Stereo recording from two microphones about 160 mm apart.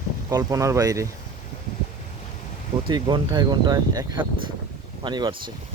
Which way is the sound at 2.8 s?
30° right (ahead or behind).